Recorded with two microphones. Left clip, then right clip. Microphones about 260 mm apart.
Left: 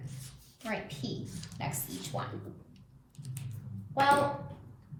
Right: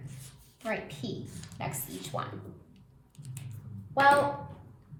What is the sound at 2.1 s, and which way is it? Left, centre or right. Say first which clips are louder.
Speech: right 2 dB; right.